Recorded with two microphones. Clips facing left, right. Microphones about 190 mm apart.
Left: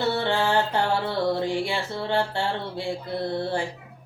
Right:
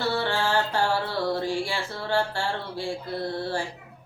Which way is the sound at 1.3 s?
20° left (ahead or behind).